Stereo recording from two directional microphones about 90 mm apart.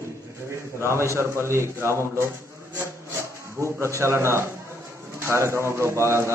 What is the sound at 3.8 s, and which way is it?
A man's voice, 30° right (ahead or behind).